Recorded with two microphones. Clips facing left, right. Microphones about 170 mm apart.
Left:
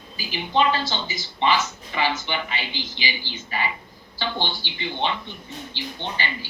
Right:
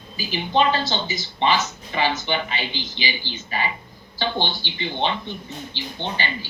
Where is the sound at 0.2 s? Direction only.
20° right (ahead or behind).